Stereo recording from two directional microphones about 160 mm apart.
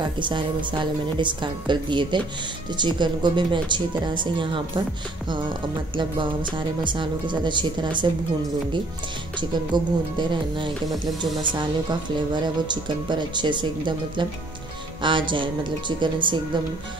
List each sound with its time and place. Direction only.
0.2 s speech: 30° right (ahead or behind)
5.9 s speech: 30° right (ahead or behind)
9.4 s speech: 30° right (ahead or behind)